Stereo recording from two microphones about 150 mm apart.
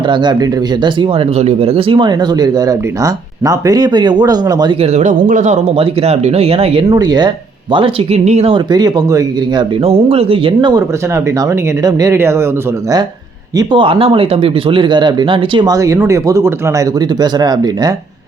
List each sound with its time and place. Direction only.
0.1 s speech: 30° right (ahead or behind)
4.8 s speech: 50° right (ahead or behind)
6.9 s speech: 25° right (ahead or behind)
9.8 s speech: 40° right (ahead or behind); by 12.5 s 15° right (ahead or behind)
13.6 s speech: 35° right (ahead or behind)